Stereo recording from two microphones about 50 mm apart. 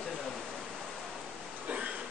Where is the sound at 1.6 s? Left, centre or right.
Right.